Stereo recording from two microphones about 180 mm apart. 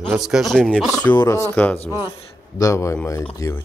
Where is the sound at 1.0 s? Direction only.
15° left (ahead or behind).